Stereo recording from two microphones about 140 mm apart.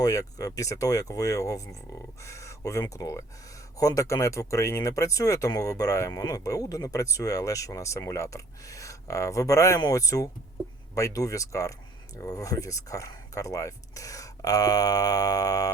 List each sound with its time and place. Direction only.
0.0 s speech: 25° left (ahead or behind)